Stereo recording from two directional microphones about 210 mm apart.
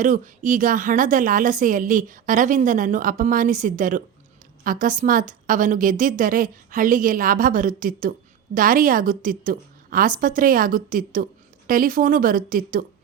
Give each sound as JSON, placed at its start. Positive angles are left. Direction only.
{"t": 0.0, "sound": "a woman's voice", "side_deg": -40}